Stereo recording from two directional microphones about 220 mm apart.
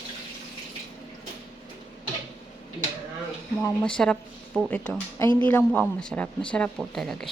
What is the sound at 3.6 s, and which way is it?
A woman's voice, 5° left (ahead or behind).